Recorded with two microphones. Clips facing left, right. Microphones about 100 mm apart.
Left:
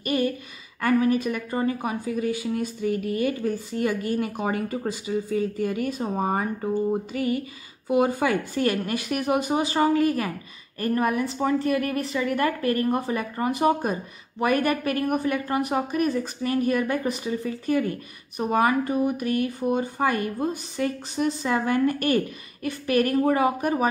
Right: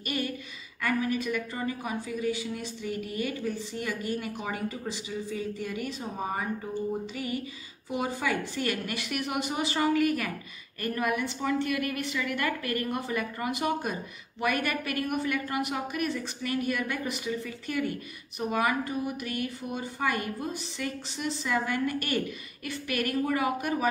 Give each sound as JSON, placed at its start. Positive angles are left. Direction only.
{"t": 0.0, "sound": "speech", "side_deg": 40}